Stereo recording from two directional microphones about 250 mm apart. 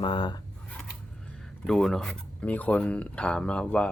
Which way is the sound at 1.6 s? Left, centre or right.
Centre.